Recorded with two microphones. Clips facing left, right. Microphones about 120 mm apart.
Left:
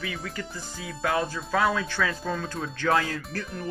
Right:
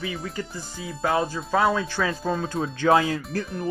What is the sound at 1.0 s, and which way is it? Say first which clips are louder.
Speech: right 3 dB; 25° right (ahead or behind).